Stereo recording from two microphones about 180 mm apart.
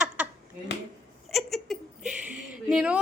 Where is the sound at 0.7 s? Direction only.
70° left (ahead or behind).